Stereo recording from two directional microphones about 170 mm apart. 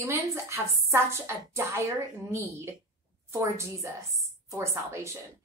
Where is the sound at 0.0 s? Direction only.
15° right (ahead or behind).